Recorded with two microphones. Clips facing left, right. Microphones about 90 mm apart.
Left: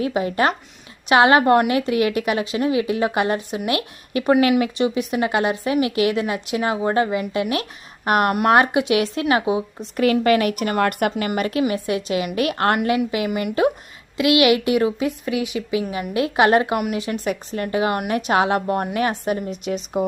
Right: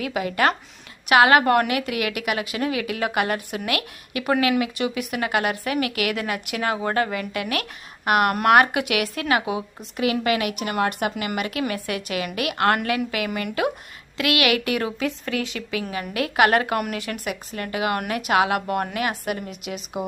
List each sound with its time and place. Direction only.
0.0 s a woman's voice: 30° left (ahead or behind)
10.0 s a woman's voice: 40° left (ahead or behind)
11.3 s a woman's voice: 40° left (ahead or behind)
11.7 s a woman's voice: 25° left (ahead or behind)
12.3 s a woman's voice: 35° left (ahead or behind)
17.2 s a woman's voice: 30° left (ahead or behind)